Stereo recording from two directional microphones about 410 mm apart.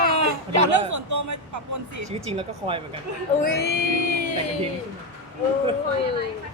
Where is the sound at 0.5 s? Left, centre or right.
Right.